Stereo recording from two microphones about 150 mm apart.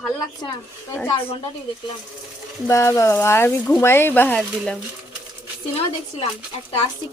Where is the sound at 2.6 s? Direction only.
20° left (ahead or behind).